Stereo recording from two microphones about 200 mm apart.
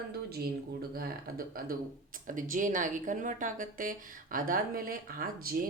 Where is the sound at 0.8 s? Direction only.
50° right (ahead or behind).